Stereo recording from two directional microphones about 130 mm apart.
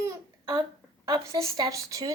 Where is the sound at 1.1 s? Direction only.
30° right (ahead or behind).